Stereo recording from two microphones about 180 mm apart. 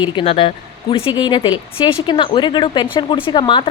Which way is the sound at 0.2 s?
30° left (ahead or behind).